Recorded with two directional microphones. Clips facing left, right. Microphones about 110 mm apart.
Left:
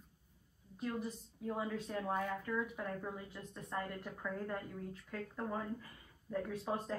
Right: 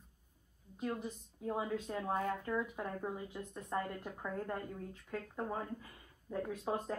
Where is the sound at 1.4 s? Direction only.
10° right (ahead or behind).